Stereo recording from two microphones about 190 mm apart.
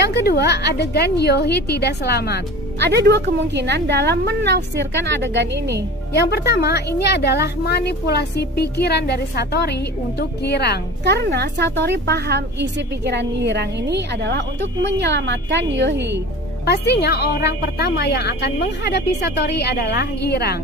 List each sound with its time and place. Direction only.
0.1 s a woman's voice: 60° left (ahead or behind)
2.8 s a woman's voice: 60° right (ahead or behind)
6.1 s a woman's voice: 60° left (ahead or behind)
11.1 s a woman's voice: 60° right (ahead or behind)
16.6 s a woman's voice: 60° left (ahead or behind)